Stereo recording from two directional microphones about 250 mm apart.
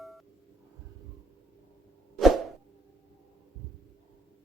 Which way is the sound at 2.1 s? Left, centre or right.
Centre.